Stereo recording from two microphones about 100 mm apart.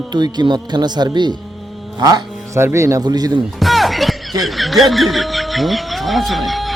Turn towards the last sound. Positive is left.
turn(degrees=0)  # may be behind; listen again after turning